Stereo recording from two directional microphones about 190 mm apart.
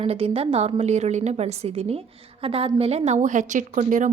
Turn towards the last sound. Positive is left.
turn(degrees=-40)  # may be behind; listen again after turning